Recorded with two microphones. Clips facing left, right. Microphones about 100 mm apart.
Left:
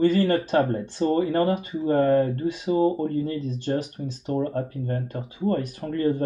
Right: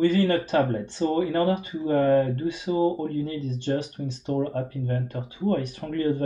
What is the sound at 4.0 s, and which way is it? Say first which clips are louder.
Speech: even; 25° left (ahead or behind).